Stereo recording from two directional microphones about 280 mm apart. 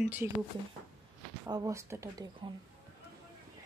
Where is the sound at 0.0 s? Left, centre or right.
Centre.